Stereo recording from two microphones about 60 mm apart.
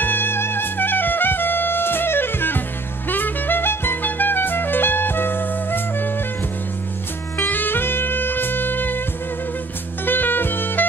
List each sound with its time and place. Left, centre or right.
0.0 s music: left
7.3 s music: left
10.0 s music: left